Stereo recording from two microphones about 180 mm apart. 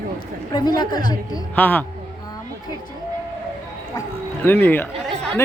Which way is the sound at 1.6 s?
10° left (ahead or behind).